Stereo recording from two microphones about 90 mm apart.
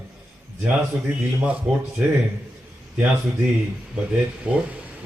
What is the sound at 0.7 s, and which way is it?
Speech, 15° right (ahead or behind).